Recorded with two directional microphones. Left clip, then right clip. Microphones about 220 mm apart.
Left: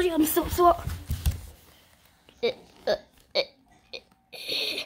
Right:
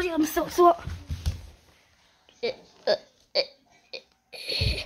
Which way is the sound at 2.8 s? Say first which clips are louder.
Right 2 dB; centre (ahead or behind).